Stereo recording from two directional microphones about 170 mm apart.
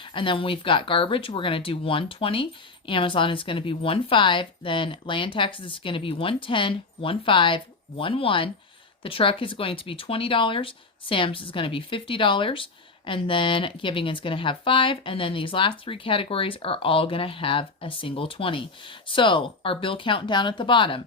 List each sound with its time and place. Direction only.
0.0 s speech: 30° left (ahead or behind)